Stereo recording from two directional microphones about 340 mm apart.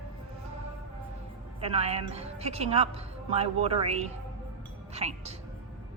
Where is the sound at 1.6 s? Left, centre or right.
Centre.